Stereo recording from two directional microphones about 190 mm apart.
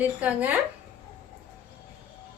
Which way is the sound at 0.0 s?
10° right (ahead or behind).